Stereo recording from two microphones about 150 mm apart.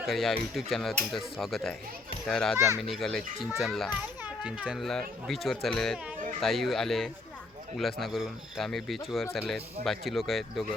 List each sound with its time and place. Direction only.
0.0 s speech: centre (ahead or behind)